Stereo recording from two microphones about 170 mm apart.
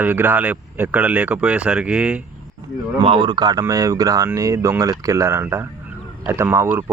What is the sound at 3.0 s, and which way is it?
Speech, 30° right (ahead or behind).